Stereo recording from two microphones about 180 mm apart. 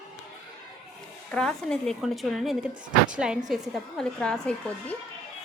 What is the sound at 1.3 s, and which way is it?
A woman's voice, 5° left (ahead or behind).